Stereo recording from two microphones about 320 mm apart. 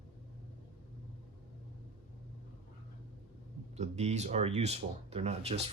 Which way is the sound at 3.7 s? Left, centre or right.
Right.